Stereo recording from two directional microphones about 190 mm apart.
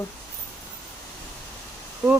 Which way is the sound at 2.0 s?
5° right (ahead or behind).